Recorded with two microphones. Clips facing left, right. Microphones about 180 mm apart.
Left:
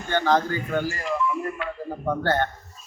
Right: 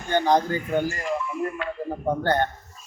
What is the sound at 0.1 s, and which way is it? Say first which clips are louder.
Speech: right 1 dB; 15° right (ahead or behind).